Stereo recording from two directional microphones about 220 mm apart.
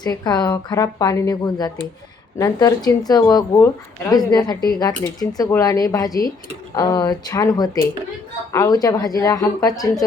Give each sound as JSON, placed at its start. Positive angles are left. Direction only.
{"t": 0.0, "sound": "a woman's voice", "side_deg": 15}